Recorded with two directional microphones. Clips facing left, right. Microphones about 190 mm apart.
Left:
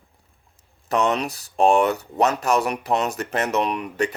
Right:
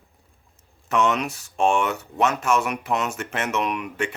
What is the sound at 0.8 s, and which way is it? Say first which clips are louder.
Speech: left 1 dB; 35° left (ahead or behind).